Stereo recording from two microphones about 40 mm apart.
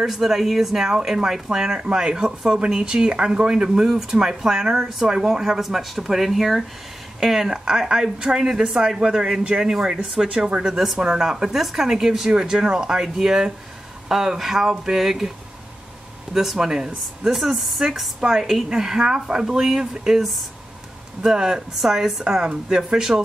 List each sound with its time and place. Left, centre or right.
0.0 s a woman's voice: centre
9.6 s a woman's voice: centre
16.3 s a woman's voice: centre
17.3 s a woman's voice: centre
18.7 s a woman's voice: centre
21.2 s a woman's voice: centre
22.4 s speech: right